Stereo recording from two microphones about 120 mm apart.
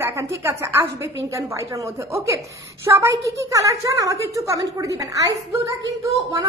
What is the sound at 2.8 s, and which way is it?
A woman's voice, 25° right (ahead or behind).